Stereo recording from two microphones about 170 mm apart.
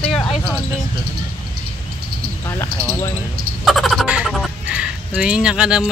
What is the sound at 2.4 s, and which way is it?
Cricket, 15° left (ahead or behind).